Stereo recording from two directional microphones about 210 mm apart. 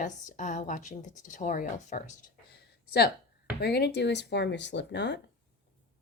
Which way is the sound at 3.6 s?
50° left (ahead or behind).